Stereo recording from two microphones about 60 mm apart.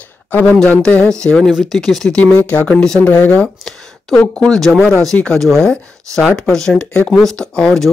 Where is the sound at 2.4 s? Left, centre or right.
Left.